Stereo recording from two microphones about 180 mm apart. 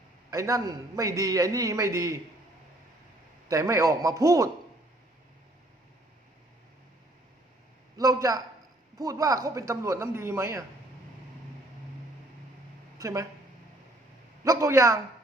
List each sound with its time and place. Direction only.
0.3 s a man's voice: 20° right (ahead or behind)
3.5 s speech: 15° right (ahead or behind)
7.9 s a man's voice: 20° right (ahead or behind)
13.0 s speech: 15° right (ahead or behind)
14.4 s speech: 15° right (ahead or behind)